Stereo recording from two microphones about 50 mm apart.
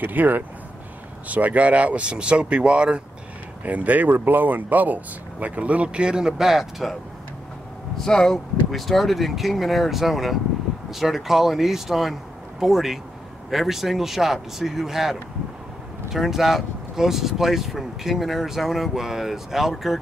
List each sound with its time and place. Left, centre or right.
0.0 s speech: right
3.6 s speech: right; by 7.0 s centre
8.0 s speech: centre